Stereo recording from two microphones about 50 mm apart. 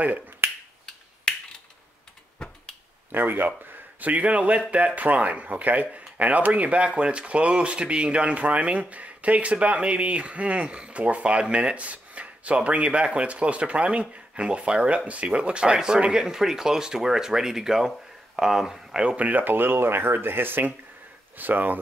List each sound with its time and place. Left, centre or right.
0.0 s speech: right
1.3 s finger snapping: centre
3.1 s speech: right
4.0 s a man's voice: right; by 19.1 s centre
19.1 s speech: right